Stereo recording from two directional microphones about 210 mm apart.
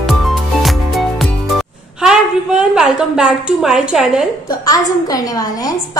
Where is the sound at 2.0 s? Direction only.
5° right (ahead or behind).